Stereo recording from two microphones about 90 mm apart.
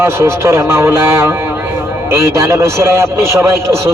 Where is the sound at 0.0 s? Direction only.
30° right (ahead or behind).